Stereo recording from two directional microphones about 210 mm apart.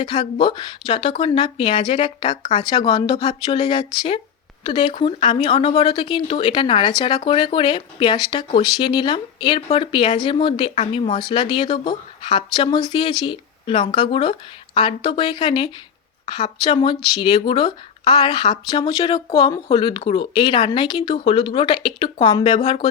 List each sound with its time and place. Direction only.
0.0 s speech: 25° left (ahead or behind)